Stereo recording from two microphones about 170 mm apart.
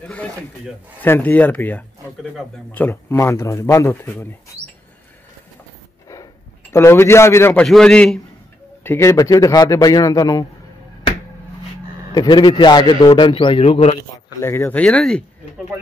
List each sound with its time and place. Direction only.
0.0 s speech: 10° left (ahead or behind)
6.7 s speech: 15° left (ahead or behind)
7.6 s a man's voice: 5° left (ahead or behind); by 10.4 s 20° left (ahead or behind)
12.1 s a man's voice: 25° left (ahead or behind)
14.1 s speech: 15° left (ahead or behind)